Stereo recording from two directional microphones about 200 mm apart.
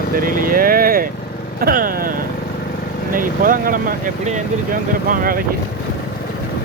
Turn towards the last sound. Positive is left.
turn(degrees=-45)  # may be behind; listen again after turning